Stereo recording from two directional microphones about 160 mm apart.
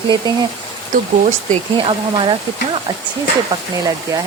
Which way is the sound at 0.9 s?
55° right (ahead or behind).